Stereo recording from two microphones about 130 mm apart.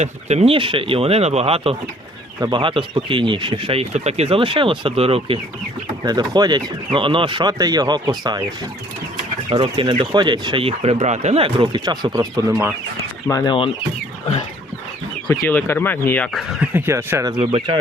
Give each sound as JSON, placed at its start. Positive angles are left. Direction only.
{"t": 0.0, "sound": "speech", "side_deg": -55}
{"t": 2.4, "sound": "speech", "side_deg": -35}
{"t": 6.0, "sound": "speech", "side_deg": -30}
{"t": 9.5, "sound": "speech", "side_deg": -40}
{"t": 13.2, "sound": "speech", "side_deg": 25}
{"t": 15.3, "sound": "speech", "side_deg": 25}
{"t": 16.3, "sound": "speech", "side_deg": 0}
{"t": 16.6, "sound": "speech", "side_deg": -15}
{"t": 17.4, "sound": "speech", "side_deg": -45}